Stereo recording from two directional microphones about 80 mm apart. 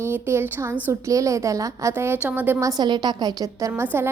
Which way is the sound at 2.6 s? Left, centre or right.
Right.